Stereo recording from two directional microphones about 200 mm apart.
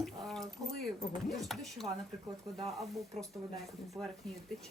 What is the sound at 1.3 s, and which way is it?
Speech, centre (ahead or behind).